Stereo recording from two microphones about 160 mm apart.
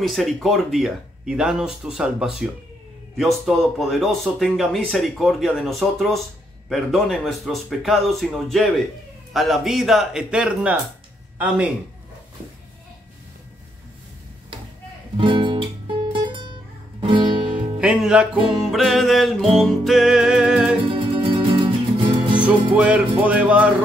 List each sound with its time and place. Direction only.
0.0 s a man's voice: centre (ahead or behind)
15.1 s guitar: 30° right (ahead or behind)
17.7 s speech: 5° right (ahead or behind)
20.9 s music: 30° right (ahead or behind)
22.4 s music: 10° right (ahead or behind)